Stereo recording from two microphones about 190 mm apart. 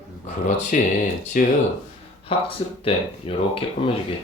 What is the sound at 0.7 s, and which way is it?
Speech, 40° left (ahead or behind).